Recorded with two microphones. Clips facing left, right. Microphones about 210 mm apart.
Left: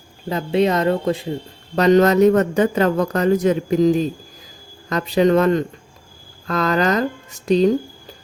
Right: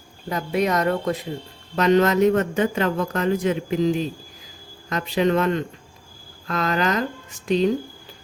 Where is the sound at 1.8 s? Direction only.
40° left (ahead or behind).